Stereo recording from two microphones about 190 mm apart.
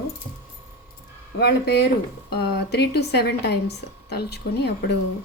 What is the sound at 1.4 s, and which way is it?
A woman's voice, 60° left (ahead or behind).